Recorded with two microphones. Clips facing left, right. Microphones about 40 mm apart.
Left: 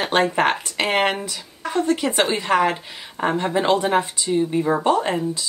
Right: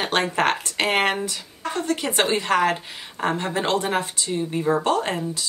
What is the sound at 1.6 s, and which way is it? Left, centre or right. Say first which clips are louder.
Speech: left 4 dB; centre.